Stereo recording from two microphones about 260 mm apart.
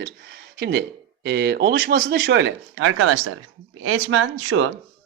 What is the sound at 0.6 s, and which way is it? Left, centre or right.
Speech, right.